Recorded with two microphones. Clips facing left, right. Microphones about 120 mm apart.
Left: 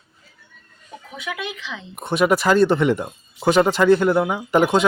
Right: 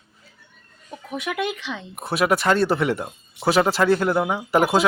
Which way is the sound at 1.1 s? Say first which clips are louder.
Right 4 dB; 55° right (ahead or behind).